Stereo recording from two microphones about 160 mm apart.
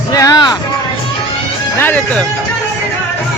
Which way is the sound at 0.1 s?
20° left (ahead or behind).